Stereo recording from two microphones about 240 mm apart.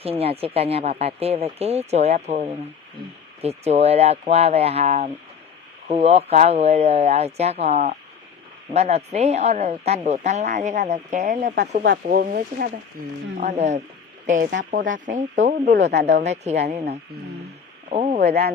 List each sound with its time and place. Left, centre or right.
0.0 s speech: right
16.2 s speech: right